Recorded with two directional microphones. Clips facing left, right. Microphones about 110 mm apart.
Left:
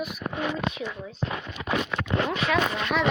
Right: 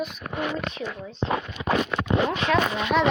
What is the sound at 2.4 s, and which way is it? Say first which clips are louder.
Speech: right 2 dB; 5° left (ahead or behind).